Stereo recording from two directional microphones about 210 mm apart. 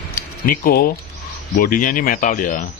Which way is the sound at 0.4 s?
45° left (ahead or behind).